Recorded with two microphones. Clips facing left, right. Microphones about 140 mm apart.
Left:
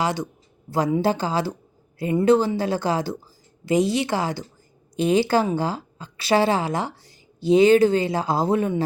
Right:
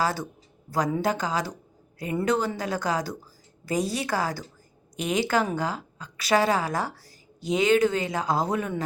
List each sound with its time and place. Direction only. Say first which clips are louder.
0.0 s a woman's voice: left 2 dB; 20° left (ahead or behind)